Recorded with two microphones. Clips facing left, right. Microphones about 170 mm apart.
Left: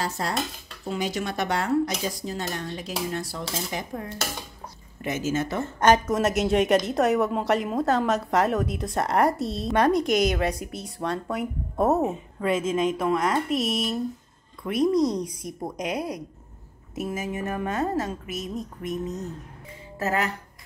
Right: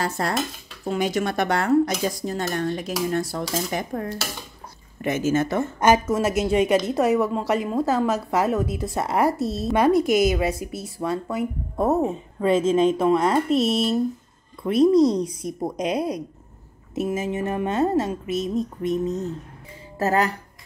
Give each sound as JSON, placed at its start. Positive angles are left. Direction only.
{"t": 0.2, "sound": "dishes", "side_deg": -60}
{"t": 0.8, "sound": "speech", "side_deg": -55}
{"t": 5.8, "sound": "a woman's voice", "side_deg": -5}
{"t": 12.1, "sound": "a woman's voice", "side_deg": -30}